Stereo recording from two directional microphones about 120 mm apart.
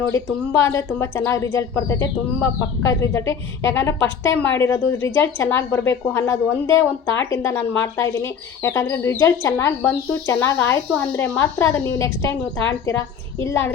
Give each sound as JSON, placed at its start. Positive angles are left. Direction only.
{"t": 0.1, "sound": "speech", "side_deg": 25}